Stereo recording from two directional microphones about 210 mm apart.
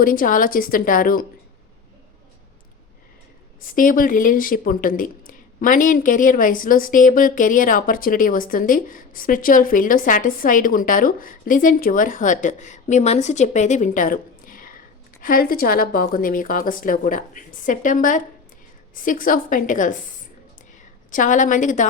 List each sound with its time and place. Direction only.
0.0 s speech: 40° left (ahead or behind)
3.6 s a woman's voice: 40° left (ahead or behind)